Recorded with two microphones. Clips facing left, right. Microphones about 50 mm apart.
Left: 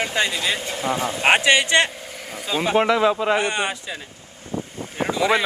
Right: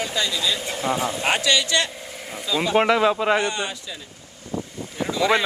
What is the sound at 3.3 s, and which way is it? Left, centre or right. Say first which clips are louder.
Speech: left 1 dB; left.